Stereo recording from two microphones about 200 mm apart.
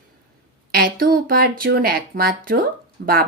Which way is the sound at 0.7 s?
50° right (ahead or behind).